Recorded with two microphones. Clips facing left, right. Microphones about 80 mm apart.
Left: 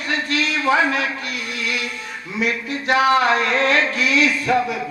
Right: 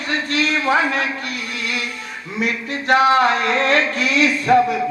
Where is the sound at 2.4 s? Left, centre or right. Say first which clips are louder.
Even; right.